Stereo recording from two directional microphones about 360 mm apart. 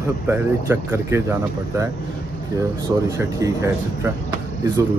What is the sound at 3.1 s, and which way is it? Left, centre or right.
Speech, centre.